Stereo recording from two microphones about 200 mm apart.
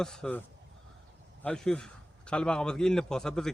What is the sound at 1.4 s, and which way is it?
A man's voice, 5° left (ahead or behind).